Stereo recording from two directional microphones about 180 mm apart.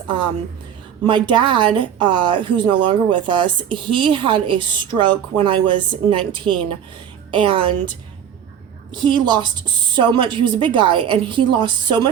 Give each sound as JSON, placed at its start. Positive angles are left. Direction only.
{"t": 1.0, "sound": "a woman's voice", "side_deg": -25}